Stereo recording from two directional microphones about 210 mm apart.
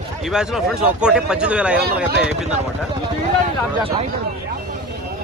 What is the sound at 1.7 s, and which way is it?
Speech, 50° right (ahead or behind).